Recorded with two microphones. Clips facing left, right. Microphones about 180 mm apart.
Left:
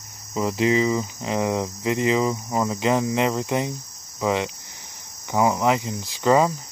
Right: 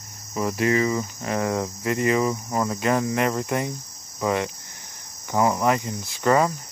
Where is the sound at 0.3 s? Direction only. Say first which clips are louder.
Left 1 dB; 20° left (ahead or behind).